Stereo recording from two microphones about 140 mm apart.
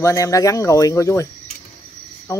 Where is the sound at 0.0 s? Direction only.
20° left (ahead or behind).